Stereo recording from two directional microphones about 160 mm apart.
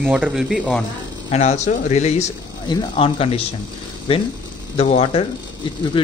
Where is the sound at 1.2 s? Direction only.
45° left (ahead or behind).